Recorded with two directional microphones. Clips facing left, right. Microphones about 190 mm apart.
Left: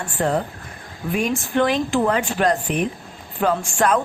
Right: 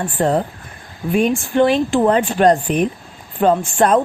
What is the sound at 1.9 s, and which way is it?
A woman's voice, 30° right (ahead or behind).